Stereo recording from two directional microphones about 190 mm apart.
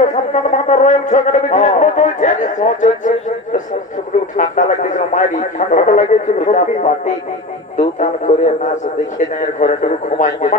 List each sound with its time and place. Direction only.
0.0 s a man's voice: 40° left (ahead or behind)
8.0 s a man's voice: 40° left (ahead or behind)